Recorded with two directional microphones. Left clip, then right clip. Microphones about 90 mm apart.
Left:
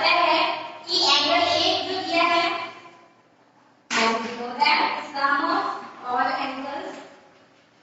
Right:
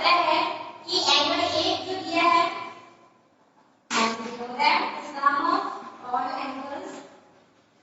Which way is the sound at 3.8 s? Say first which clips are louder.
Left 3 dB; 30° left (ahead or behind).